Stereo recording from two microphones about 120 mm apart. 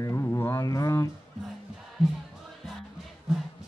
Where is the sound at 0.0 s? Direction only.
25° left (ahead or behind).